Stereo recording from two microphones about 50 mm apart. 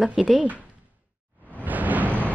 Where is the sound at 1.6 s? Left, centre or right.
Right.